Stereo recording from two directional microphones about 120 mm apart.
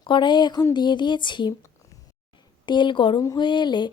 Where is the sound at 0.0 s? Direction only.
40° left (ahead or behind).